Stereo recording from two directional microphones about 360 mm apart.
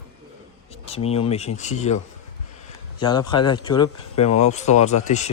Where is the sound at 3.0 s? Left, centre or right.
Centre.